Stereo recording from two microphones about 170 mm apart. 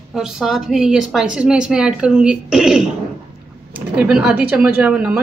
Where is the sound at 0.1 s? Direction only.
Centre (ahead or behind).